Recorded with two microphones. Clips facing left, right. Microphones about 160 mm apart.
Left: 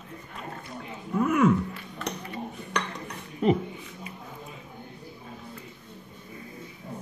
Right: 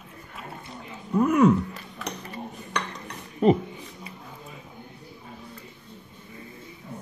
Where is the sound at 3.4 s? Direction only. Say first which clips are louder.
Right 4 dB; 40° right (ahead or behind).